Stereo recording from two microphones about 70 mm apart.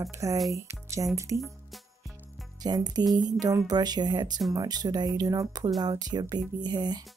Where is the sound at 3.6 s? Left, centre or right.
Right.